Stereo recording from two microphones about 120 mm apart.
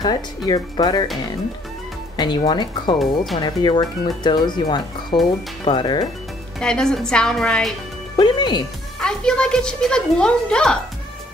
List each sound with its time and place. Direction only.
0.0 s speech: 35° left (ahead or behind)
2.1 s speech: 40° left (ahead or behind)
6.6 s a woman's voice: 5° left (ahead or behind)
8.2 s speech: 35° left (ahead or behind)
9.0 s a woman's voice: 5° left (ahead or behind)